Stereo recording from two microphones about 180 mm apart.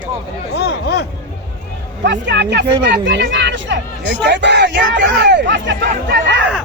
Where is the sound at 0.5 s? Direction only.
65° left (ahead or behind).